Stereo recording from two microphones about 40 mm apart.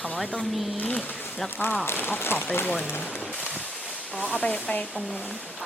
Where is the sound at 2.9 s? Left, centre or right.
Left.